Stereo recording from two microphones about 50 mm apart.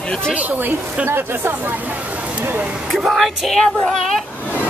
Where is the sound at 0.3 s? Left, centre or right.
Right.